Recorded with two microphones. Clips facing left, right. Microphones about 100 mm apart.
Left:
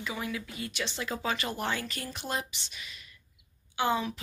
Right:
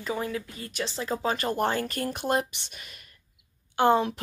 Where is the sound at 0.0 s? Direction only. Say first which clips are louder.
Right 5 dB; 40° right (ahead or behind).